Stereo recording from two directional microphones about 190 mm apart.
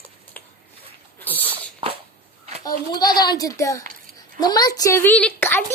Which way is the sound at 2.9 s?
20° left (ahead or behind).